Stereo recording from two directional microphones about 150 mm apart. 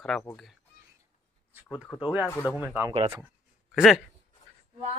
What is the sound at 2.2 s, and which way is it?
Speech, 20° left (ahead or behind).